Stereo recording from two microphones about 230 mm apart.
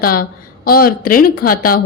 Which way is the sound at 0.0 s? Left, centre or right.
Left.